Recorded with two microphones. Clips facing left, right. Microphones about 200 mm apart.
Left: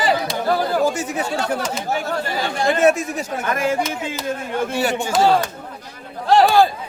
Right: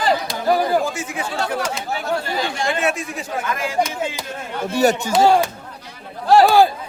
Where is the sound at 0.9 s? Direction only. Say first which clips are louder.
Left 4 dB; 40° left (ahead or behind).